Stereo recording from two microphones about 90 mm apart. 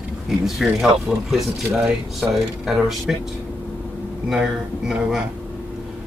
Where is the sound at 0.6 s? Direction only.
5° right (ahead or behind).